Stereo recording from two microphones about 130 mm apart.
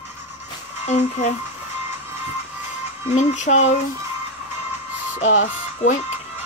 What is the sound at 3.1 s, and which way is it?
Speech, 65° left (ahead or behind).